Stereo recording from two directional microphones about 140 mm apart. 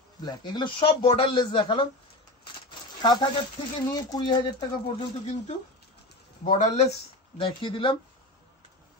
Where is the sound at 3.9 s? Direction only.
30° left (ahead or behind).